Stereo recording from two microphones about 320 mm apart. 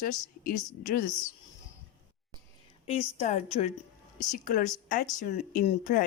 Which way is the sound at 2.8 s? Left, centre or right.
Left.